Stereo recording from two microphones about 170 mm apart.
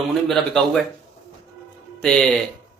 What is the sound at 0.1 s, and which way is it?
Speech, centre (ahead or behind).